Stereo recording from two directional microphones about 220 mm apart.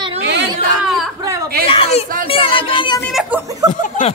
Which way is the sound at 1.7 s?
25° left (ahead or behind).